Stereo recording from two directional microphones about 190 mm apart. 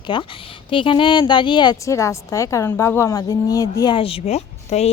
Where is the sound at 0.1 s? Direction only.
25° left (ahead or behind).